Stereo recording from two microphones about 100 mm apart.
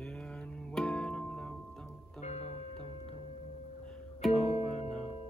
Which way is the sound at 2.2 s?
90° left.